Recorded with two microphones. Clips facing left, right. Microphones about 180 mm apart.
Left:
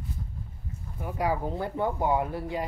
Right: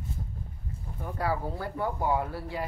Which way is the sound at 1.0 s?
15° left (ahead or behind).